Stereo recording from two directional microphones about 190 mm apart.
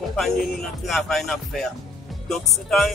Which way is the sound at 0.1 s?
Centre (ahead or behind).